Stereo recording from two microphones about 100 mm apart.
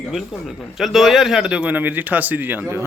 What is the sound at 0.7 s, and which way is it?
Speech, centre (ahead or behind).